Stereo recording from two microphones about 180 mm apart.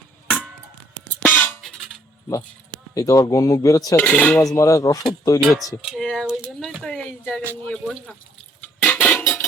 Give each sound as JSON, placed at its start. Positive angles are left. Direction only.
{"t": 0.3, "sound": "a sound", "side_deg": -5}
{"t": 1.2, "sound": "music", "side_deg": 10}
{"t": 2.9, "sound": "cutlery", "side_deg": 20}
{"t": 4.5, "sound": "cutlery", "side_deg": 15}
{"t": 5.4, "sound": "speech", "side_deg": 0}
{"t": 8.6, "sound": "a sound", "side_deg": 10}